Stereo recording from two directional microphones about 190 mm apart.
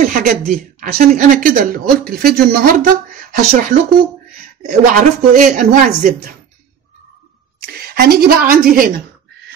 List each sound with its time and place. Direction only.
0.1 s a sound: 45° right (ahead or behind)
0.5 s speech: 45° right (ahead or behind)
7.6 s a woman's voice: 55° right (ahead or behind)